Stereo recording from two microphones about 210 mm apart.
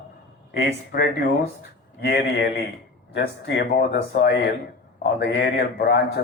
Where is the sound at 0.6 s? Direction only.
50° left (ahead or behind).